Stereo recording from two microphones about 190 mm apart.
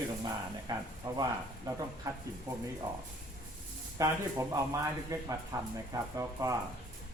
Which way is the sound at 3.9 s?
15° right (ahead or behind).